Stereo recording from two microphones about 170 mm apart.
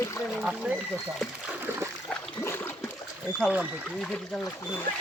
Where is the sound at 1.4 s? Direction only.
10° right (ahead or behind).